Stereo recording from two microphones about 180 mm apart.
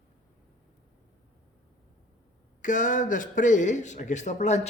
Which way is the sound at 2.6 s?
45° left (ahead or behind).